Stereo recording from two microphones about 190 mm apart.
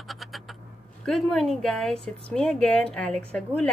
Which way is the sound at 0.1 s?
Centre (ahead or behind).